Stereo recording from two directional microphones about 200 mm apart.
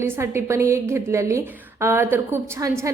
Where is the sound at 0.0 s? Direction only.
15° right (ahead or behind).